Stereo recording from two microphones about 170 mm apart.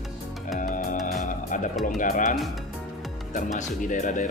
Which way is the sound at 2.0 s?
50° left (ahead or behind).